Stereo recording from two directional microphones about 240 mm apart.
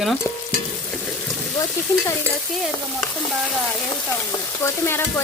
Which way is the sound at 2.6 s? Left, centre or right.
Centre.